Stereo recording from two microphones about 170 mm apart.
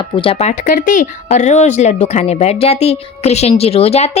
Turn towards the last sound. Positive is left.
turn(degrees=40)  # may be behind; listen again after turning